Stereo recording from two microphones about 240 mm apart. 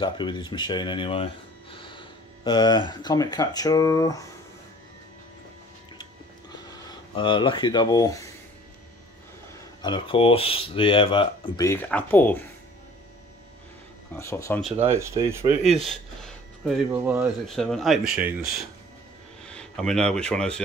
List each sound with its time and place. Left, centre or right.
0.0 s speech: centre
6.9 s speech: centre
9.8 s speech: centre
14.1 s speech: centre
14.6 s speech: centre
19.4 s speech: centre